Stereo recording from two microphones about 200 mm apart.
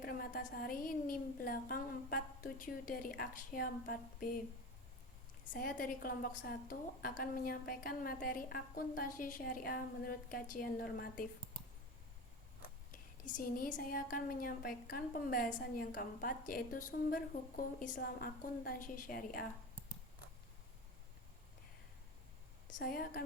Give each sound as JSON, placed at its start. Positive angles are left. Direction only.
{"t": 0.0, "sound": "speech", "side_deg": 45}
{"t": 5.5, "sound": "speech", "side_deg": 45}
{"t": 12.6, "sound": "speech", "side_deg": 40}
{"t": 22.6, "sound": "a woman's voice", "side_deg": 50}